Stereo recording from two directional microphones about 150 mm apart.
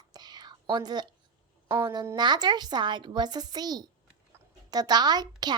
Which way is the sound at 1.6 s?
25° right (ahead or behind).